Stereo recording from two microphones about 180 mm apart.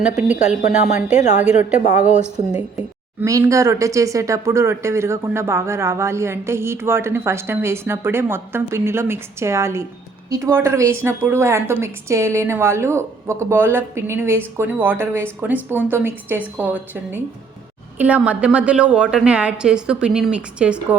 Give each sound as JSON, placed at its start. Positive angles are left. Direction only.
{"t": 0.2, "sound": "a woman's voice", "side_deg": -5}
{"t": 3.2, "sound": "a woman's voice", "side_deg": -15}